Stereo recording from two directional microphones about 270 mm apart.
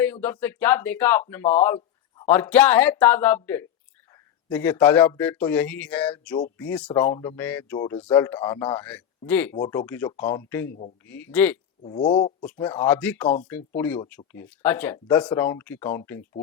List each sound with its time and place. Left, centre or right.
0.0 s speech: centre
11.8 s speech: centre
12.5 s speech: centre